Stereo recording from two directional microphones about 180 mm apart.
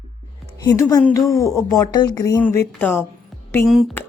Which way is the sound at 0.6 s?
20° left (ahead or behind).